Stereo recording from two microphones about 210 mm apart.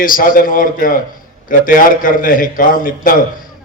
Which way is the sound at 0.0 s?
40° left (ahead or behind).